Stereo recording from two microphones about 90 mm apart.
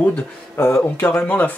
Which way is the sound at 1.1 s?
15° left (ahead or behind).